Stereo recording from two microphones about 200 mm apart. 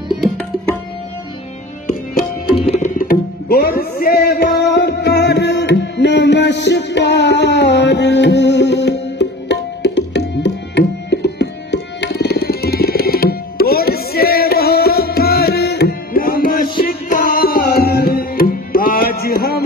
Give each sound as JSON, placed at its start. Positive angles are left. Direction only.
{"t": 0.1, "sound": "tabla", "side_deg": 0}
{"t": 2.5, "sound": "tabla", "side_deg": 30}